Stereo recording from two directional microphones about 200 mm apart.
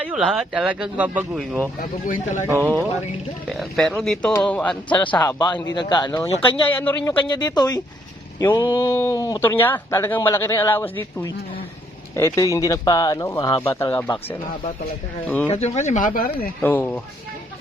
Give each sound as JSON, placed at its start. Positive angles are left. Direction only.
{"t": 0.0, "sound": "speech", "side_deg": -5}
{"t": 1.8, "sound": "speech", "side_deg": 40}
{"t": 2.5, "sound": "speech", "side_deg": -10}
{"t": 3.5, "sound": "speech", "side_deg": 0}
{"t": 5.0, "sound": "speech", "side_deg": 20}
{"t": 12.1, "sound": "speech", "side_deg": 15}
{"t": 15.4, "sound": "speech", "side_deg": 30}
{"t": 16.6, "sound": "speech", "side_deg": 10}